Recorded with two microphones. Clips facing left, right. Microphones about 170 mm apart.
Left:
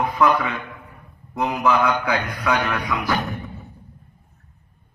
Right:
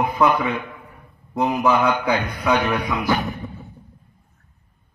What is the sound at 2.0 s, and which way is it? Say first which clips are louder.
A man's voice: right 2 dB; 20° right (ahead or behind).